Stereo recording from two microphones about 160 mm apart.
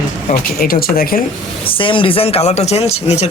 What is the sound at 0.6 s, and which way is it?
Speech, 70° left (ahead or behind).